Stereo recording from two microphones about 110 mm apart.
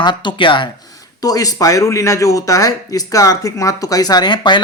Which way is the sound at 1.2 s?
35° left (ahead or behind).